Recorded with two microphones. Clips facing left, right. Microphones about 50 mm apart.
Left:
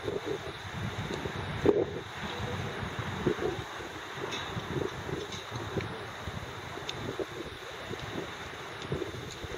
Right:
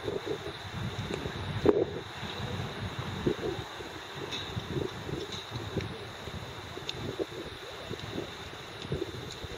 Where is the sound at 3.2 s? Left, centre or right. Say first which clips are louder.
Left 1 dB; centre.